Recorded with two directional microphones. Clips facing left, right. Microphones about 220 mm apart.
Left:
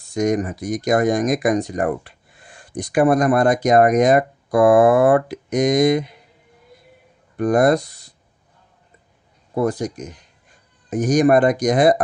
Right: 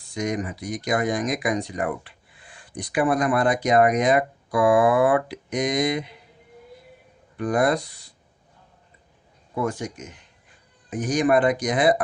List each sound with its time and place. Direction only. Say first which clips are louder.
0.1 s speech: left 7 dB; 45° left (ahead or behind)
7.3 s speech: left 6 dB; 45° left (ahead or behind)
9.6 s speech: left 6 dB; 35° left (ahead or behind)